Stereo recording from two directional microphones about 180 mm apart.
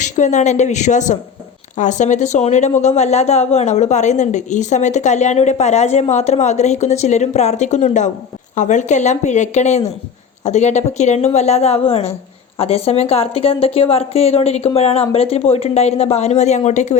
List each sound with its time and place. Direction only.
0.0 s a woman's voice: 40° left (ahead or behind)